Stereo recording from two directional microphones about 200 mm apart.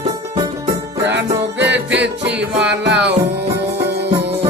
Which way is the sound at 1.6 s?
60° right (ahead or behind).